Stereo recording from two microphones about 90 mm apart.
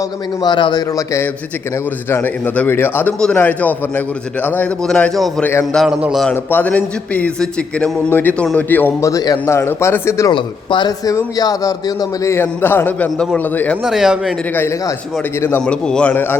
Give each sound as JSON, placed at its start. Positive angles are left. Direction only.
{"t": 0.4, "sound": "speech", "side_deg": 55}
{"t": 2.0, "sound": "a man's voice", "side_deg": 25}
{"t": 5.7, "sound": "speech", "side_deg": -5}
{"t": 6.3, "sound": "a man's voice", "side_deg": 20}
{"t": 9.0, "sound": "a man's voice", "side_deg": 40}
{"t": 9.5, "sound": "a man's voice", "side_deg": 30}
{"t": 10.3, "sound": "speech", "side_deg": 65}
{"t": 10.8, "sound": "a man's voice", "side_deg": 45}
{"t": 13.8, "sound": "speech", "side_deg": -5}
{"t": 15.4, "sound": "a man's voice", "side_deg": 25}
{"t": 15.6, "sound": "a man's voice", "side_deg": 10}